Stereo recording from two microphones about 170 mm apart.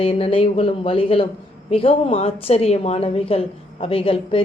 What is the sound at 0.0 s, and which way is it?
A woman's voice, 35° left (ahead or behind).